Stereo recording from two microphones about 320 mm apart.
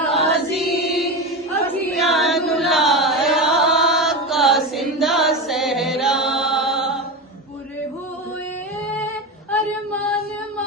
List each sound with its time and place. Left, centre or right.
0.1 s choir: centre
0.7 s mantra: left
1.6 s chant: centre
9.5 s female singing: centre